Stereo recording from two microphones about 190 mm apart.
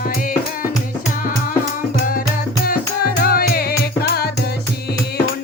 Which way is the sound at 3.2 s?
50° left (ahead or behind).